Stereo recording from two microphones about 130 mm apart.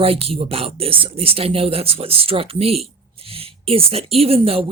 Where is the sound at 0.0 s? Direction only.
50° right (ahead or behind).